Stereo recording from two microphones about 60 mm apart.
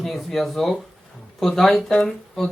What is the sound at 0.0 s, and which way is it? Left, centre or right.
Speech, centre.